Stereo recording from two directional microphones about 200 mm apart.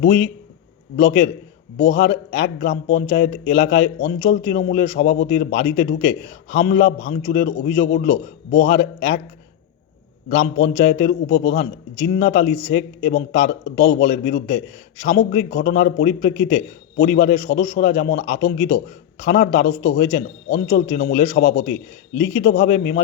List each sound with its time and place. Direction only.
0.0 s a man's voice: 50° left (ahead or behind)
10.2 s a man's voice: 60° left (ahead or behind)